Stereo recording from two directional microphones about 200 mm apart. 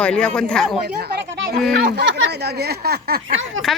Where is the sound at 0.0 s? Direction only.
5° left (ahead or behind).